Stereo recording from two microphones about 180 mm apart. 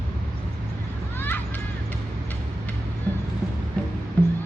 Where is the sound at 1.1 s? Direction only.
10° left (ahead or behind).